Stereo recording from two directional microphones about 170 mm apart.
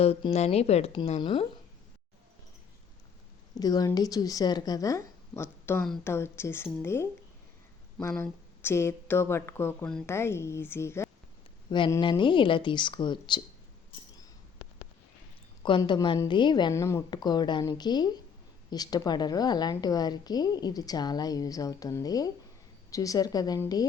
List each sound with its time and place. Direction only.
0.0 s speech: 35° left (ahead or behind)
3.5 s a woman's voice: 20° left (ahead or behind)
8.1 s speech: 10° left (ahead or behind)
11.9 s a woman's voice: 30° left (ahead or behind)
15.6 s a woman's voice: 30° left (ahead or behind)